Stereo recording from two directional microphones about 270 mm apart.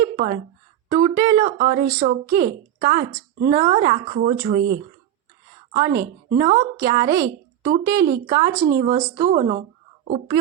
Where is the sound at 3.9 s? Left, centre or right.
Right.